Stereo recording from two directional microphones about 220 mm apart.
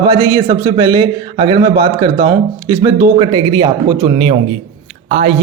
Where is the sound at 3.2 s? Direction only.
20° right (ahead or behind).